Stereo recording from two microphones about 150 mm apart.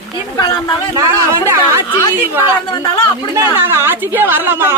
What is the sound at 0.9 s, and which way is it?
Speech, 20° right (ahead or behind).